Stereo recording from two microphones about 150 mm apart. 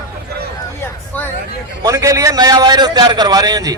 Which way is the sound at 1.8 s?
20° right (ahead or behind).